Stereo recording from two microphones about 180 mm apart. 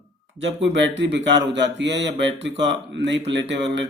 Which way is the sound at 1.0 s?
75° right (ahead or behind).